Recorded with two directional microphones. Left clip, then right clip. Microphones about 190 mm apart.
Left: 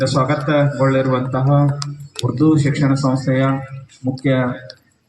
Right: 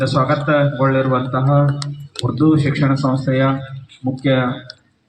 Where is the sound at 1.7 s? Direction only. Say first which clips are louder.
Even; 60° right (ahead or behind).